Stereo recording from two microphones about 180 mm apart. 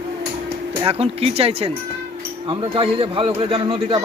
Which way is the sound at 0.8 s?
35° right (ahead or behind).